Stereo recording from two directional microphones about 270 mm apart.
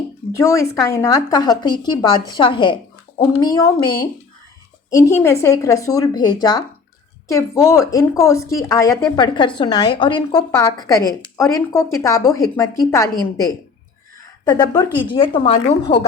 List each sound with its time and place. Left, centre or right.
0.3 s a woman's voice: centre